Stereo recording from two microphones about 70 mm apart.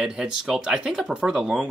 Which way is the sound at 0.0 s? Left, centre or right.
Centre.